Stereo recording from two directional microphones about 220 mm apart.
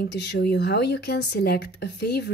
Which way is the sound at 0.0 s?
50° left (ahead or behind).